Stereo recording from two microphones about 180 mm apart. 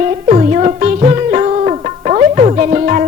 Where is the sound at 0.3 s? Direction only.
35° right (ahead or behind).